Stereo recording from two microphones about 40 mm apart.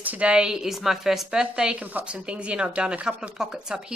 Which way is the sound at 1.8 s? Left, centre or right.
Right.